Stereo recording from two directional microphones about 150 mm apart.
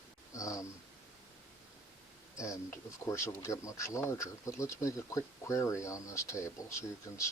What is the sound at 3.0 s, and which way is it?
Speech, 20° left (ahead or behind).